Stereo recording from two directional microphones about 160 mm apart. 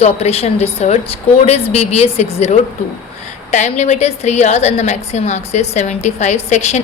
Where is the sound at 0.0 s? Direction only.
40° left (ahead or behind).